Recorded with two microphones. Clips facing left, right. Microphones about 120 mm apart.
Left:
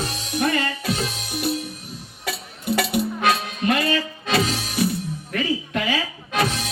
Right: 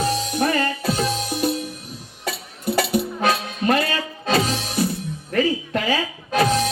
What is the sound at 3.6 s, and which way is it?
Music, 35° right (ahead or behind).